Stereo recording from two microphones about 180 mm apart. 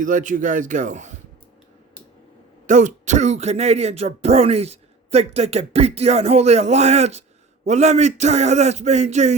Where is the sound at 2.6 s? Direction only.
40° right (ahead or behind).